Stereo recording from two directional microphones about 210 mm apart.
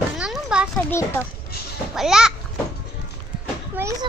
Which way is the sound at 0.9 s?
10° left (ahead or behind).